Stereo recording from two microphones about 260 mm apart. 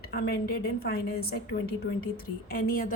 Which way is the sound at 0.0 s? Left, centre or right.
Left.